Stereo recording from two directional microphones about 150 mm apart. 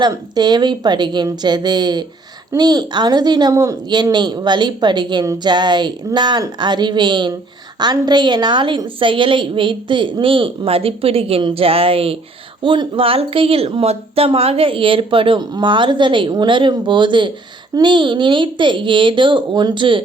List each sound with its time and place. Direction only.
0.0 s a woman's voice: 30° right (ahead or behind)